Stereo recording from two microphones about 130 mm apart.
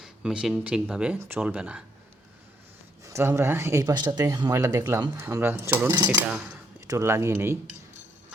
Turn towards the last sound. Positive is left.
turn(degrees=-20)  # may be behind; listen again after turning